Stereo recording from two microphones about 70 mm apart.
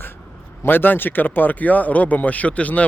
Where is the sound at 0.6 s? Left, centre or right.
Left.